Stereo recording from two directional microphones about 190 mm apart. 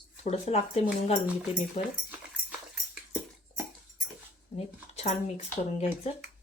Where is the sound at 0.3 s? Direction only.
35° left (ahead or behind).